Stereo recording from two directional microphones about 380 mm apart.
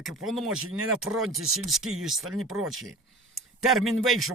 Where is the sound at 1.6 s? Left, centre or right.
Centre.